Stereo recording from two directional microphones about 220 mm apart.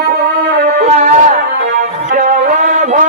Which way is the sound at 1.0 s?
30° right (ahead or behind).